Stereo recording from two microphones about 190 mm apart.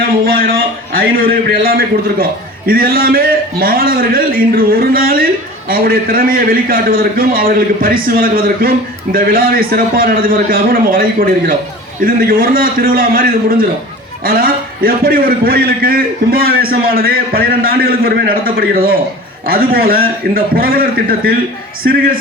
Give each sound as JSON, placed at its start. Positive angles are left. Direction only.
{"t": 0.9, "sound": "a man's voice", "side_deg": -50}